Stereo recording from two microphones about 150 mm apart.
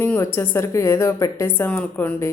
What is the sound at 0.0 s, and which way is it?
Speech, 15° left (ahead or behind).